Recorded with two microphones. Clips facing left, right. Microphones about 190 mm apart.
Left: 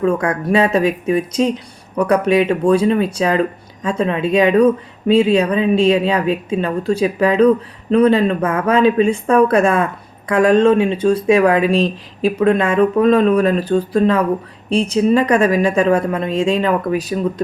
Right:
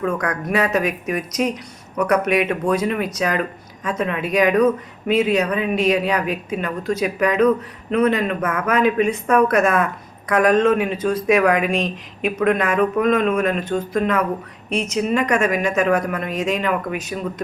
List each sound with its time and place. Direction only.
0.0 s speech: 30° left (ahead or behind)